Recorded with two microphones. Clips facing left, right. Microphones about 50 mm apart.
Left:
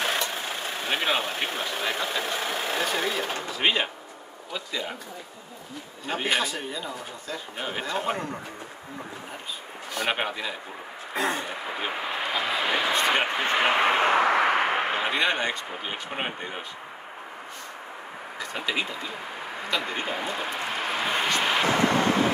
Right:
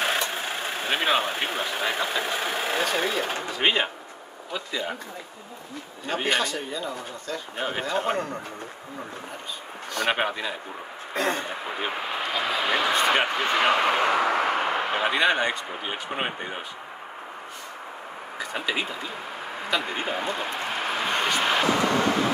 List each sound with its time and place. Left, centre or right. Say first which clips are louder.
0.8 s speech: right 2 dB; centre
1.2 s speech: right 2 dB; right
1.6 s a man's voice: right 2 dB; centre
6.0 s a man's voice: right 1 dB; centre
9.9 s a man's voice: right 3 dB; centre
13.3 s a man's voice: right 1 dB; centre
13.7 s a sound: left 1 dB; left
15.0 s a man's voice: right 3 dB; centre
18.5 s speech: right 1 dB; centre
20.3 s a sound: right 1 dB; centre